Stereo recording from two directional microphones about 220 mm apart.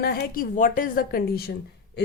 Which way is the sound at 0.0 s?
45° left (ahead or behind).